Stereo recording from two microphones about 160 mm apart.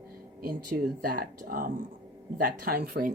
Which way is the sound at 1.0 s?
65° right (ahead or behind).